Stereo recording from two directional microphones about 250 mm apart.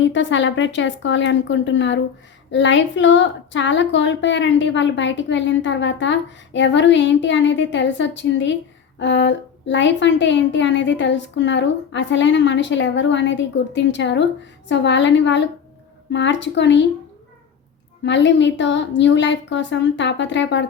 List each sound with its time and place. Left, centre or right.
0.0 s a woman's voice: left
18.0 s a woman's voice: left